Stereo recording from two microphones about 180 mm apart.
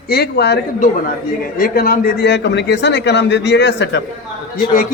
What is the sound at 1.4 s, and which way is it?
A man's voice, 55° left (ahead or behind).